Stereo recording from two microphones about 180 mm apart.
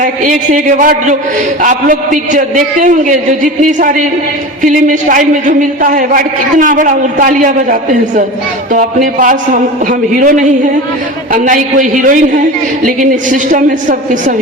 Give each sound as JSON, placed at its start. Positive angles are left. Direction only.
{"t": 0.0, "sound": "a man's voice", "side_deg": -45}